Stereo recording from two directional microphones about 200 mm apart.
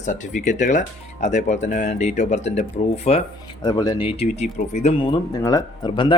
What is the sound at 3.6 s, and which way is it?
Speech, 20° left (ahead or behind).